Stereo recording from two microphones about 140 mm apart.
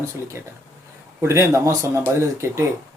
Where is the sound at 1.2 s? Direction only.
20° right (ahead or behind).